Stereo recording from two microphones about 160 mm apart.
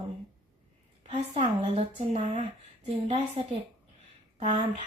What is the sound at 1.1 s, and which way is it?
A woman's voice, 40° right (ahead or behind).